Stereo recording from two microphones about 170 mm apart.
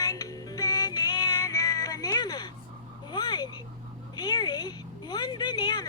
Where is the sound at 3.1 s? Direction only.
25° left (ahead or behind).